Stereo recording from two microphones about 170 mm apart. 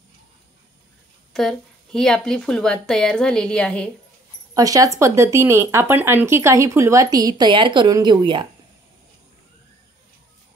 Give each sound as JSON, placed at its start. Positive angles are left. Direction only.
{"t": 1.3, "sound": "a woman's voice", "side_deg": 0}
{"t": 4.6, "sound": "speech", "side_deg": -20}